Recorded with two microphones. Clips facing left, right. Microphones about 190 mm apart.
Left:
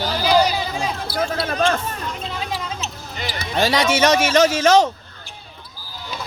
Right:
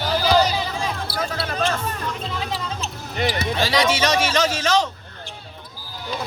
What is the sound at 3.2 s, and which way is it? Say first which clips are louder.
Speech: right 7 dB; 55° right (ahead or behind).